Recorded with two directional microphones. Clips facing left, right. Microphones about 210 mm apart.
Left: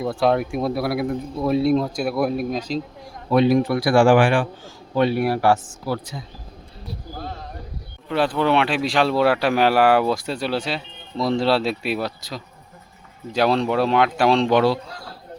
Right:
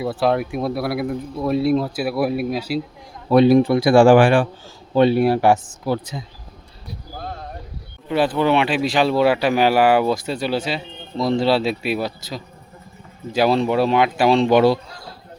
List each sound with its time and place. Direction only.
0.0 s speech: 5° right (ahead or behind)
3.2 s a man's voice: 35° right (ahead or behind)
8.1 s speech: 5° right (ahead or behind)